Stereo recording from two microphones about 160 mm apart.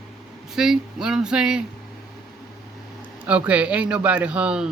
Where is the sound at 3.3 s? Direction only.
10° right (ahead or behind).